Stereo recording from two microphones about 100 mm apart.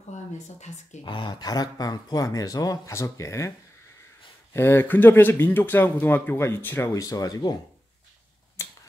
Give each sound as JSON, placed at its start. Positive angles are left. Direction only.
{"t": 1.0, "sound": "speech", "side_deg": 50}
{"t": 4.6, "sound": "speech", "side_deg": 25}
{"t": 6.9, "sound": "speech", "side_deg": 35}
{"t": 8.6, "sound": "a sound", "side_deg": 30}